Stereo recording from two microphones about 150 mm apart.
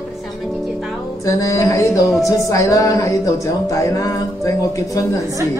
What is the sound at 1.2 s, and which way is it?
Music, 20° left (ahead or behind).